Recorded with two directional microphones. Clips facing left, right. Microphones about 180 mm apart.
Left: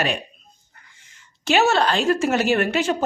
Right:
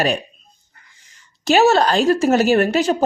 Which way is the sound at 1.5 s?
40° right (ahead or behind).